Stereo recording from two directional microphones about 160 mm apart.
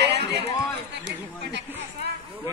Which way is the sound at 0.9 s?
90° right.